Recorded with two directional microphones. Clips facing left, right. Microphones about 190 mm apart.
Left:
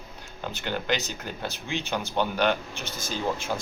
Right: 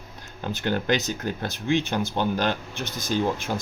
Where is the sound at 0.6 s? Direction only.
45° right (ahead or behind).